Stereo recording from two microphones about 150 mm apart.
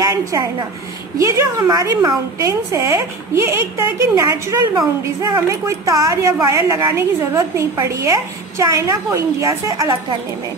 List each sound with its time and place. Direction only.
0.0 s a woman's voice: 20° right (ahead or behind)